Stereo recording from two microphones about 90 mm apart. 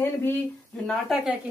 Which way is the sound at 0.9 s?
Centre (ahead or behind).